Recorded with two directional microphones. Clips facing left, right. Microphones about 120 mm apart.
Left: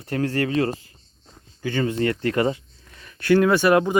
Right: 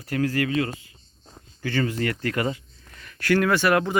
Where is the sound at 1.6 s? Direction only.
20° left (ahead or behind).